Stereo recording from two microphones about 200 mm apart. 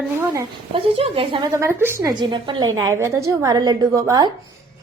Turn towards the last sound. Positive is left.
turn(degrees=-20)  # may be behind; listen again after turning